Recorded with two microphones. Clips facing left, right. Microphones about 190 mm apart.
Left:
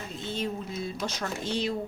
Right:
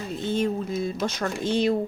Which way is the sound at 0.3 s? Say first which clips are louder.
Right 8 dB; 50° right (ahead or behind).